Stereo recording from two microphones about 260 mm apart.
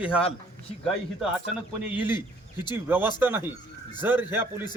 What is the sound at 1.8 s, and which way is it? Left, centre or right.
Speech, centre.